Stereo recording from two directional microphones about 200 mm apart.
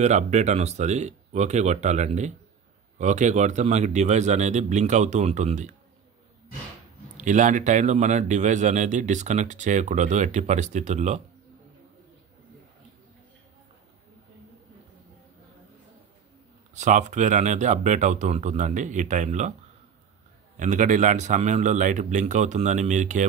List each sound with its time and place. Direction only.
0.0 s speech: 35° right (ahead or behind)
7.2 s speech: 40° right (ahead or behind)
16.7 s speech: 35° right (ahead or behind)
20.5 s speech: 40° right (ahead or behind)